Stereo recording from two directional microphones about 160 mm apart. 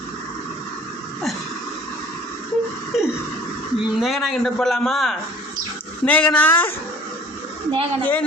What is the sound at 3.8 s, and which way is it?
Speech, centre (ahead or behind).